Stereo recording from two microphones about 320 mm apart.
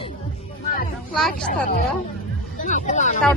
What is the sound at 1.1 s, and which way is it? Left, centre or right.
Speech, centre.